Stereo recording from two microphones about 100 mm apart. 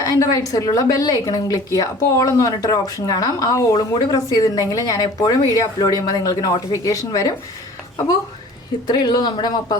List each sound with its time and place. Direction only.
0.0 s speech: 35° left (ahead or behind)
8.9 s speech: 45° left (ahead or behind)